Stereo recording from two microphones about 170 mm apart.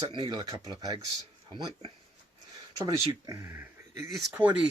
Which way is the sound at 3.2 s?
20° right (ahead or behind).